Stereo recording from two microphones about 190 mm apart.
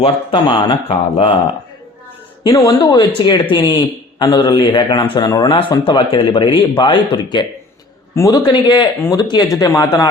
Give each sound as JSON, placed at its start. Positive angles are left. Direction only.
{"t": 0.0, "sound": "speech", "side_deg": 25}
{"t": 2.4, "sound": "speech", "side_deg": 20}